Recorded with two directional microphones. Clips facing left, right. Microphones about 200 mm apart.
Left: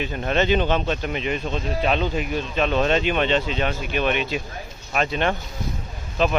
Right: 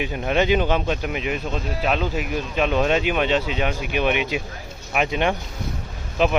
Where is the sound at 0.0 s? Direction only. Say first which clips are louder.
Right 1 dB; 10° right (ahead or behind).